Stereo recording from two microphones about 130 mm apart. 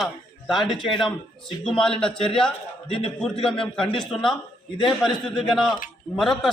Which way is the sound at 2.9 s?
45° left (ahead or behind).